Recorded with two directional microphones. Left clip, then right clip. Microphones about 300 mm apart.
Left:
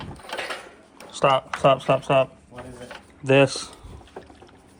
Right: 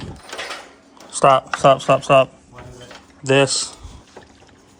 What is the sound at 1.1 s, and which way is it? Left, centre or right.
Speech, centre.